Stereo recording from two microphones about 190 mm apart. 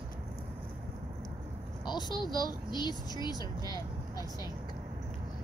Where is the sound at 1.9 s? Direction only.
20° left (ahead or behind).